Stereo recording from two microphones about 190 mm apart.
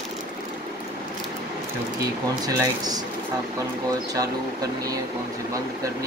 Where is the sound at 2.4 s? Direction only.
20° right (ahead or behind).